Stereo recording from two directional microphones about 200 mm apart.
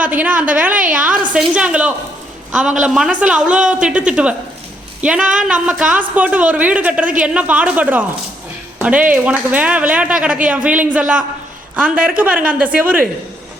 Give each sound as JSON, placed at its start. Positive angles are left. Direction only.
{"t": 0.0, "sound": "a woman's voice", "side_deg": -5}